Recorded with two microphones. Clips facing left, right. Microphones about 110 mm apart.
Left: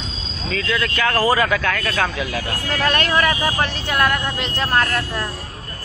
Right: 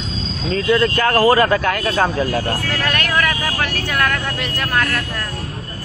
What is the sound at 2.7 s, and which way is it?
Speech, 25° left (ahead or behind).